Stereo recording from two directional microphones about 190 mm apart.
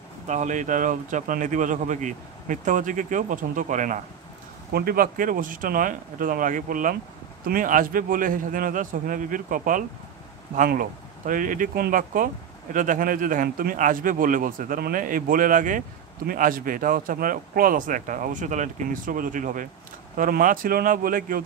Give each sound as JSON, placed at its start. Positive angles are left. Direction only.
{"t": 0.3, "sound": "speech", "side_deg": -40}